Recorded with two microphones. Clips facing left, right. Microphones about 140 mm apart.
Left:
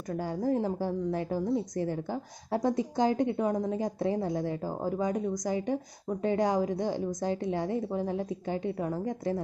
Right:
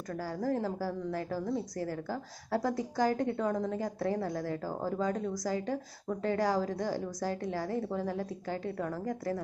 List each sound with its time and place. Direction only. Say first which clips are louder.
0.1 s a woman's voice: left 4 dB; 20° left (ahead or behind)